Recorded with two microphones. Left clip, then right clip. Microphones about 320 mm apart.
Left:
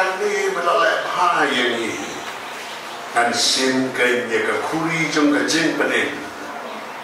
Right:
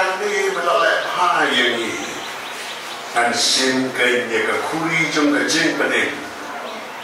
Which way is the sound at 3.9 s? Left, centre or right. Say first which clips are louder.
Right 1 dB; centre.